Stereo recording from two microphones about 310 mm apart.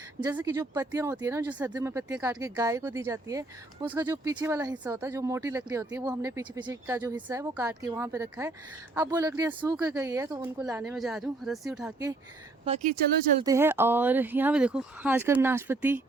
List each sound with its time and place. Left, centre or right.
0.2 s speech: centre
12.6 s speech: right
13.4 s speech: centre